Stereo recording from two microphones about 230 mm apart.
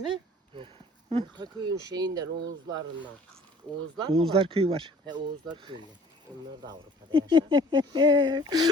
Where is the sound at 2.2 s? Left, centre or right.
Right.